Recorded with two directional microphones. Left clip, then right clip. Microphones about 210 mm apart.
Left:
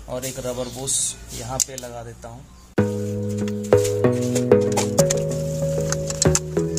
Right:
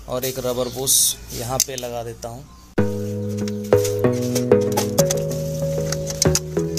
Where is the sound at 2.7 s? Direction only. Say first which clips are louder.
Even; centre (ahead or behind).